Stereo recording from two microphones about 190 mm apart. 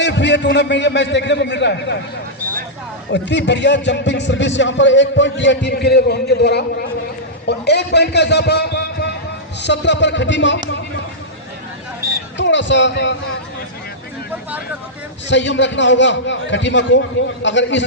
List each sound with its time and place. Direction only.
0.0 s a man's voice: 65° left (ahead or behind)
3.1 s a man's voice: 65° left (ahead or behind)
12.4 s a man's voice: 70° left (ahead or behind)
15.3 s a man's voice: 70° left (ahead or behind)